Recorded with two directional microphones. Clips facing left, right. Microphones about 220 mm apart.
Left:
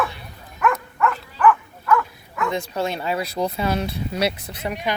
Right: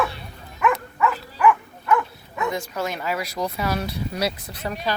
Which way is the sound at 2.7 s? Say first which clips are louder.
Left 2 dB; 30° left (ahead or behind).